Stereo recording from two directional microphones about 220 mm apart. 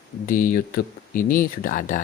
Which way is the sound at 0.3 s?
40° left (ahead or behind).